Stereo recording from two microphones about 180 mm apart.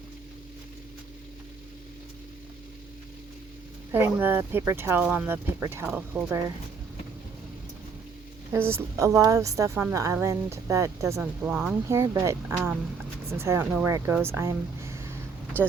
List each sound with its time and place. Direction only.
3.9 s a woman's voice: 10° right (ahead or behind)
8.5 s a woman's voice: 15° right (ahead or behind)